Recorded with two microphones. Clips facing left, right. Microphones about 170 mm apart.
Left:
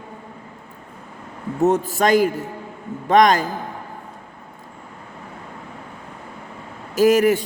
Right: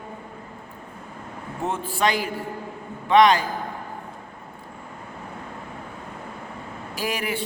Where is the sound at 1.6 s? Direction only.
45° left (ahead or behind).